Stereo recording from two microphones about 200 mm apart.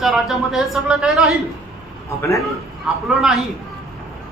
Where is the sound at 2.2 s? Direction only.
15° left (ahead or behind).